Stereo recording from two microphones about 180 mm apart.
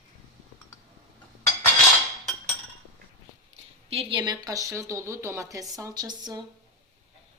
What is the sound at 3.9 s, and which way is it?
Speech, 30° right (ahead or behind).